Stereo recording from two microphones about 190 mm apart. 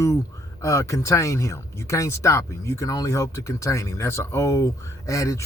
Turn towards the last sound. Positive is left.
turn(degrees=15)  # may be behind; listen again after turning